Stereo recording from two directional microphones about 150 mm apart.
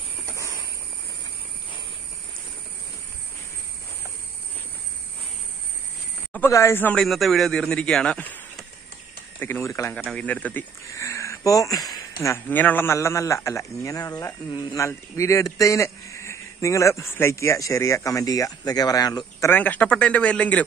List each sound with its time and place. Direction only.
0.3 s a sound: 20° left (ahead or behind)
6.3 s a man's voice: 15° left (ahead or behind)
9.4 s a man's voice: 15° left (ahead or behind)
19.5 s a man's voice: 10° left (ahead or behind)